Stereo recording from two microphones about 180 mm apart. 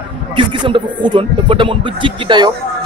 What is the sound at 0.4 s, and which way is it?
Speech, 30° right (ahead or behind).